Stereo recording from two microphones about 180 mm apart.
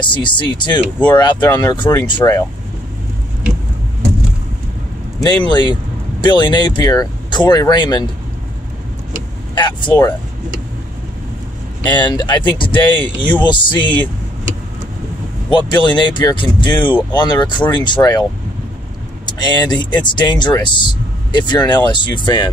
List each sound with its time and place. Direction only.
0.0 s speech: 25° left (ahead or behind)
5.2 s speech: 25° left (ahead or behind)
9.6 s speech: 25° left (ahead or behind)
11.9 s speech: 25° left (ahead or behind)
15.5 s speech: 25° left (ahead or behind)
19.2 s speech: 20° left (ahead or behind)